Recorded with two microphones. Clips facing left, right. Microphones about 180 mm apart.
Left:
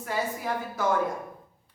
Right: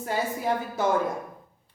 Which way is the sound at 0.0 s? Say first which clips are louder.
Right 3 dB; 25° right (ahead or behind).